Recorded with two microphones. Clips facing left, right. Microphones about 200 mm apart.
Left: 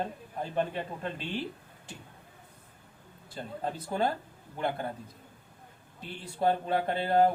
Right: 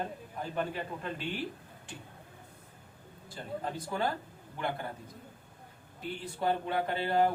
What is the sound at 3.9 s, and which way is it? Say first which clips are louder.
Speech: left 4 dB; 35° left (ahead or behind).